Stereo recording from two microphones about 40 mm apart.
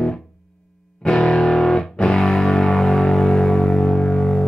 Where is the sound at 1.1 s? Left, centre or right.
Centre.